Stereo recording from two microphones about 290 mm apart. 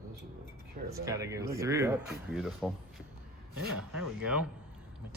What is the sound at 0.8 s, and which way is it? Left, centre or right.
Speech, centre.